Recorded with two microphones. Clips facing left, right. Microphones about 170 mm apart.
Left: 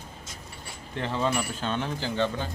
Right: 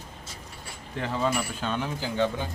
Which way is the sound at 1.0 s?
5° right (ahead or behind).